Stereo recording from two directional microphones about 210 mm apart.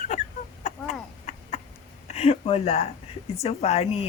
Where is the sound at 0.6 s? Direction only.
30° left (ahead or behind).